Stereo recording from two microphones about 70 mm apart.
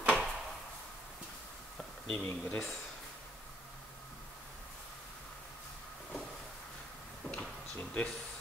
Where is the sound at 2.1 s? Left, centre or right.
Left.